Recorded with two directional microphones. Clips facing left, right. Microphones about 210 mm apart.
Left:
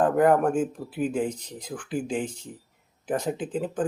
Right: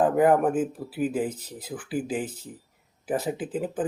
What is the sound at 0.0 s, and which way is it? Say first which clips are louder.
Speech: even; 5° right (ahead or behind).